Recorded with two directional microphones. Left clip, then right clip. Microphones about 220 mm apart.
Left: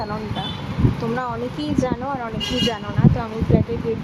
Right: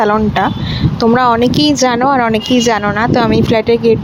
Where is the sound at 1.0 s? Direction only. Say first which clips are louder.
Right 19 dB; 40° right (ahead or behind).